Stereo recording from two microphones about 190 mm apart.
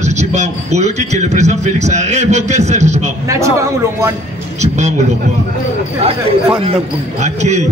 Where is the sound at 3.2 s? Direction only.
15° right (ahead or behind).